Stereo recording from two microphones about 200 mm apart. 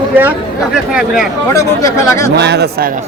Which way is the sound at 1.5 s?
15° left (ahead or behind).